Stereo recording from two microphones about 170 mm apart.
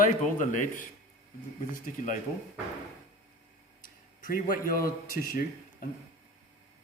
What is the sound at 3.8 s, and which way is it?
Speech, 55° left (ahead or behind).